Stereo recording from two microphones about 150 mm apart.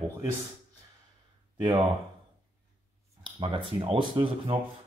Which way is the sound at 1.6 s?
35° right (ahead or behind).